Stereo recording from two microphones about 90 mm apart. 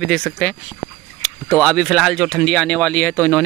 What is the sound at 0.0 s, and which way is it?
Speech, 10° left (ahead or behind).